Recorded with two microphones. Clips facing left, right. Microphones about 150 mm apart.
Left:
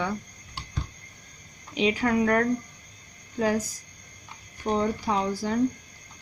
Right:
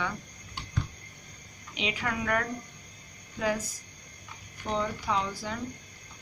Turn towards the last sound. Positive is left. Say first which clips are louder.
# left 5 dB
turn(degrees=40)  # may be behind; listen again after turning